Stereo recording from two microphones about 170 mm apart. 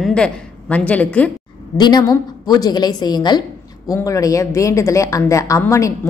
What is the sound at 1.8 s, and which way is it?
A woman's voice, 25° left (ahead or behind).